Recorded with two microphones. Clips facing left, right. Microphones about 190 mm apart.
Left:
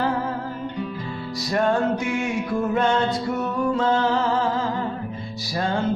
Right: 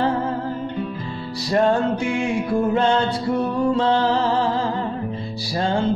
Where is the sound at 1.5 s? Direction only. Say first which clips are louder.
Right 3 dB; 30° right (ahead or behind).